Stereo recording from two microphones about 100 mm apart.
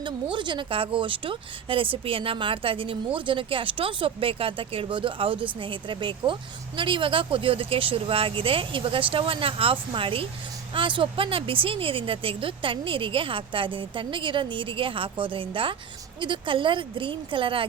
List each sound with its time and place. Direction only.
0.0 s speech: 55° right (ahead or behind)